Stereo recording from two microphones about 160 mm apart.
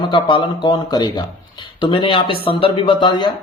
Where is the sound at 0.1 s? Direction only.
30° left (ahead or behind).